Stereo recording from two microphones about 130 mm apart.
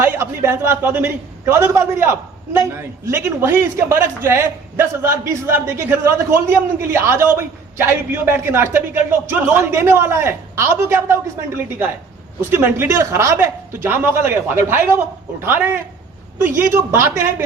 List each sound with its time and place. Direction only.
0.0 s a man's voice: 20° right (ahead or behind)